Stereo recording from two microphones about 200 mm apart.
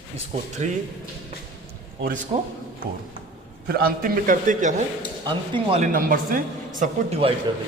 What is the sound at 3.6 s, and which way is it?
A man's voice, 50° right (ahead or behind).